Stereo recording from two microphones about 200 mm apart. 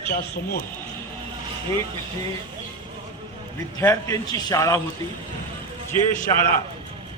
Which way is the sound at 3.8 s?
15° left (ahead or behind).